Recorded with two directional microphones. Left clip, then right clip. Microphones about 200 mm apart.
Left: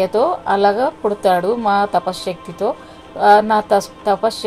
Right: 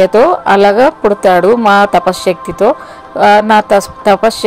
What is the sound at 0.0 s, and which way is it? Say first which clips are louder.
A woman's voice: right 9 dB; 35° right (ahead or behind).